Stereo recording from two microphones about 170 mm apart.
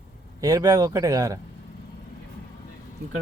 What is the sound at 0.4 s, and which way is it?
Speech, 20° right (ahead or behind).